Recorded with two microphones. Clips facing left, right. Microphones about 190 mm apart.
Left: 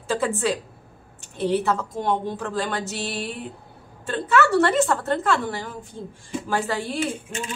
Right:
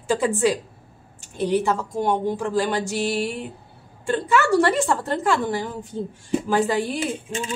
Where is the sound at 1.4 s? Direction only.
15° right (ahead or behind).